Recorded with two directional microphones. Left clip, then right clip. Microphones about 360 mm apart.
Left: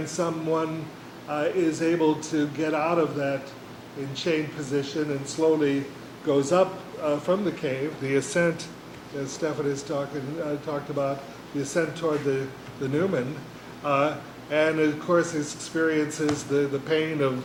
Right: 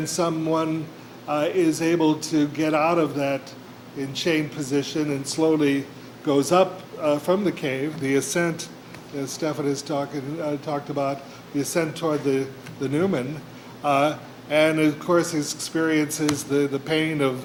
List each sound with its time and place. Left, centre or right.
0.0 s speech: right